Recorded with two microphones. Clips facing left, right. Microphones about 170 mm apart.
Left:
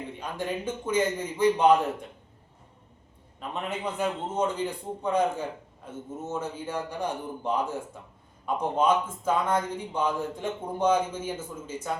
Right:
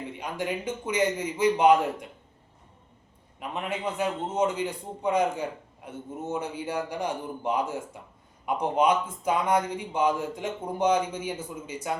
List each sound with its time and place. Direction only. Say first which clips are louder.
0.2 s a man's voice: right 1 dB; 15° right (ahead or behind)
3.5 s a man's voice: right 1 dB; 10° right (ahead or behind)